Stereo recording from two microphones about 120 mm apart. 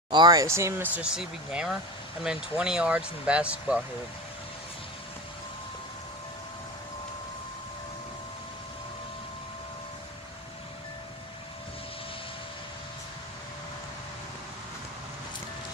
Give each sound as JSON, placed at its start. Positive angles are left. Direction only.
{"t": 0.1, "sound": "speech", "side_deg": -35}